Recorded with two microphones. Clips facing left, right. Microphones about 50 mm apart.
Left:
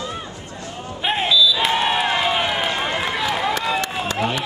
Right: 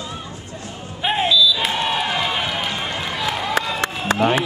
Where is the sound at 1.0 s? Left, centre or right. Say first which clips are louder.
Right 1 dB; centre.